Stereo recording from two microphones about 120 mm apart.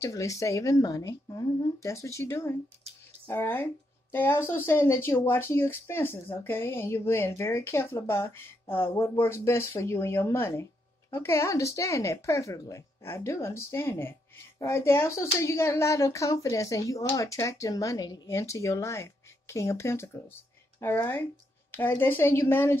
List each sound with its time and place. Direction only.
0.0 s a woman's voice: 25° left (ahead or behind)